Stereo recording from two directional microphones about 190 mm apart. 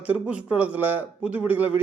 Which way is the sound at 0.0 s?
5° right (ahead or behind).